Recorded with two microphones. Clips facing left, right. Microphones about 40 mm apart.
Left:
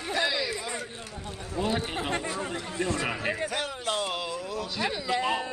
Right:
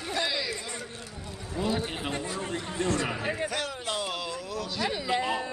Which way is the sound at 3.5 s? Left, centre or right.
Centre.